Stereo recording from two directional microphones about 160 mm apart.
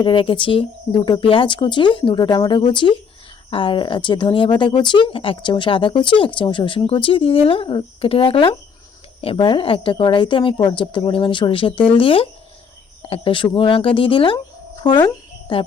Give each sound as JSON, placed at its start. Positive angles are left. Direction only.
{"t": 0.0, "sound": "speech", "side_deg": 30}
{"t": 14.3, "sound": "a sound", "side_deg": 25}
{"t": 15.5, "sound": "speech", "side_deg": 30}